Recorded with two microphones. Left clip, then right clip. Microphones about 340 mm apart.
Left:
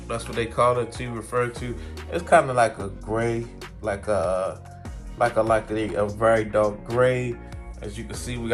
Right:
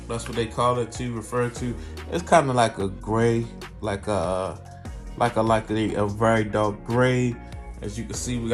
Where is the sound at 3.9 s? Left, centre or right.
Centre.